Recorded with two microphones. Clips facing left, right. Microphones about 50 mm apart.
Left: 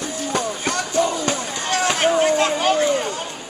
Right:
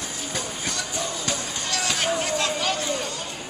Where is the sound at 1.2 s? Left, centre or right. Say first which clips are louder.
Left 6 dB; left.